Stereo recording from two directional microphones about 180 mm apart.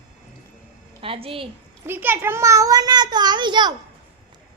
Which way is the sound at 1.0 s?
30° right (ahead or behind).